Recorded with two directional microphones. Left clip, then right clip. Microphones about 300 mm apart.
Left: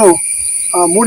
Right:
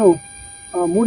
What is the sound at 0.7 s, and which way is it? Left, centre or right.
Speech, centre.